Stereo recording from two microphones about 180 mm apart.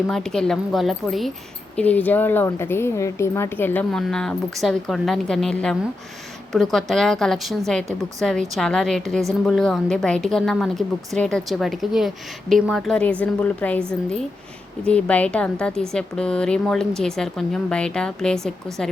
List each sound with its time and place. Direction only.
0.1 s a woman's voice: 5° left (ahead or behind)
14.8 s speech: 5° left (ahead or behind)